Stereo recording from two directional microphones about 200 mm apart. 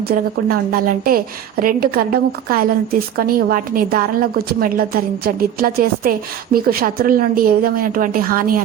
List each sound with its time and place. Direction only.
0.1 s a woman's voice: 50° right (ahead or behind)